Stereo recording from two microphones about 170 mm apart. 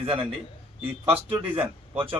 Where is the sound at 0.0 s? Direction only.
30° right (ahead or behind).